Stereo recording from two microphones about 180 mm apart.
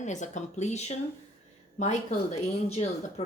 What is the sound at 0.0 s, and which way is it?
Speech, 40° left (ahead or behind).